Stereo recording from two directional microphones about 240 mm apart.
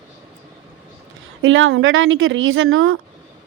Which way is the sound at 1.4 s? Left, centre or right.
Right.